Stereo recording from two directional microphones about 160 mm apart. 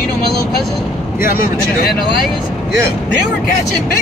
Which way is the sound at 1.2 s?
60° left (ahead or behind).